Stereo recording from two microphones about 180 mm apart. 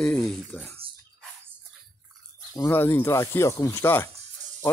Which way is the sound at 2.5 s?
15° left (ahead or behind).